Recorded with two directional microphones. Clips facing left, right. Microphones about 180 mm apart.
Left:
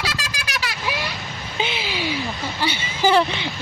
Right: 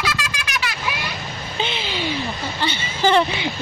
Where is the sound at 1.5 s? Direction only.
10° left (ahead or behind).